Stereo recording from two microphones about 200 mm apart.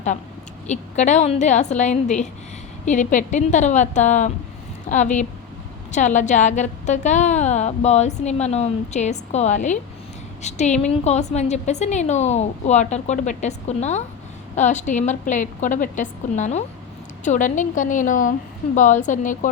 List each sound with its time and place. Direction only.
0.7 s a woman's voice: 35° left (ahead or behind)